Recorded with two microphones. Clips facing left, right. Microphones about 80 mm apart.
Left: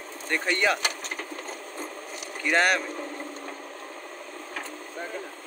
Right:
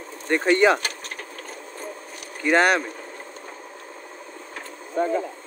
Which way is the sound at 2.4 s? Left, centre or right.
Right.